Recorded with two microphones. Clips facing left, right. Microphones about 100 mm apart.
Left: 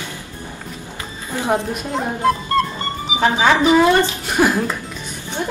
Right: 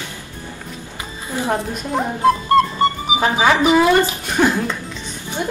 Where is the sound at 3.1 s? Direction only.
15° right (ahead or behind).